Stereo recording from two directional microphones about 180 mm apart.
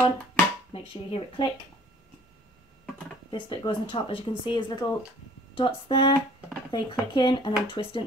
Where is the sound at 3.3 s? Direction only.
25° left (ahead or behind).